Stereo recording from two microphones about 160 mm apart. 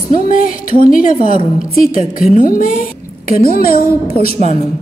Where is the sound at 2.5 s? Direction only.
60° left (ahead or behind).